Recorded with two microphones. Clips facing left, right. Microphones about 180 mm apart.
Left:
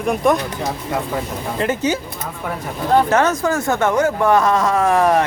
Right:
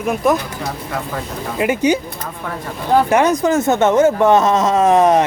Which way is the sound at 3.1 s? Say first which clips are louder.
Right 3 dB; 15° right (ahead or behind).